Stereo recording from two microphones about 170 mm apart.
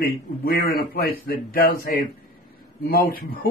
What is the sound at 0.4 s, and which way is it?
A man's voice, 60° left (ahead or behind).